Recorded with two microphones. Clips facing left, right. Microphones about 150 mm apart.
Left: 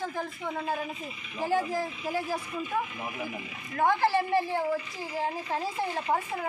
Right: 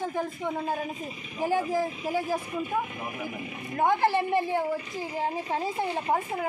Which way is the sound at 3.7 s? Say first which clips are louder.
Right 1 dB; 20° right (ahead or behind).